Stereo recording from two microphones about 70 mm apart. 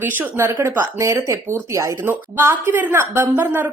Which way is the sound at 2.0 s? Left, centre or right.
Right.